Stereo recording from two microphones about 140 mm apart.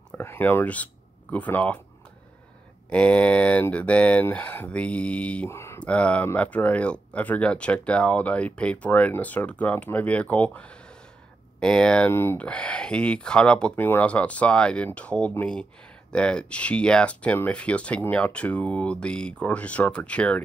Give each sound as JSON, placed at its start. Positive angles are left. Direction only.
{"t": 0.1, "sound": "speech", "side_deg": 15}
{"t": 2.9, "sound": "speech", "side_deg": 5}
{"t": 12.1, "sound": "speech", "side_deg": 15}